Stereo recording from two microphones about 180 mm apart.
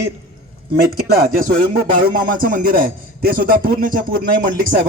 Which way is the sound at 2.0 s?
50° right (ahead or behind).